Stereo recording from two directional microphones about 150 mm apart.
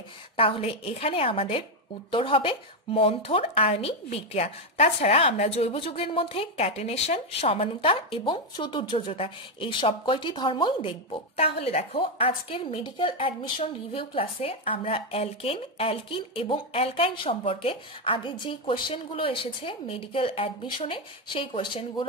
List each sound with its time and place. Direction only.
0.4 s speech: 40° left (ahead or behind)